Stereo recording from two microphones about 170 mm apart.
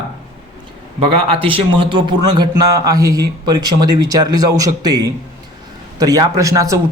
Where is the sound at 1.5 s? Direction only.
30° right (ahead or behind).